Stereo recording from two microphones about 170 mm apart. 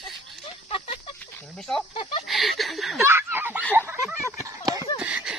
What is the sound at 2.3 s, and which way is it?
Speech, centre (ahead or behind).